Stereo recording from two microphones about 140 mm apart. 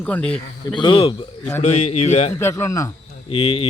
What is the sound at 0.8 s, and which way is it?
Speech, 35° left (ahead or behind).